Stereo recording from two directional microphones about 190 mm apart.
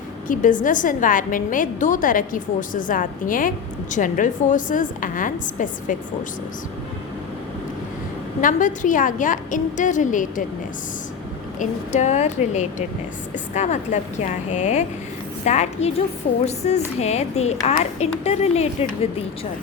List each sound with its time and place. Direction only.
0.3 s a woman's voice: 45° left (ahead or behind)
8.4 s a woman's voice: 45° left (ahead or behind)
11.6 s a woman's voice: 40° left (ahead or behind)